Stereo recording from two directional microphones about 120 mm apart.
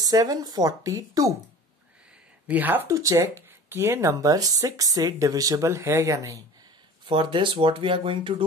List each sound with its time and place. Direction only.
0.0 s speech: 30° right (ahead or behind)
2.4 s speech: 15° right (ahead or behind)
2.9 s speech: 30° right (ahead or behind)
7.1 s speech: 45° right (ahead or behind)